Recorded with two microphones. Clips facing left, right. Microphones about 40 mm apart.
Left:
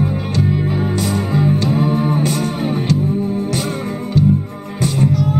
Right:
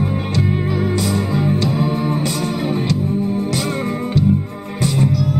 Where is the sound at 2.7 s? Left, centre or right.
Right.